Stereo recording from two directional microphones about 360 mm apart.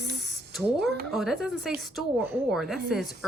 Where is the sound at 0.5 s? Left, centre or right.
Centre.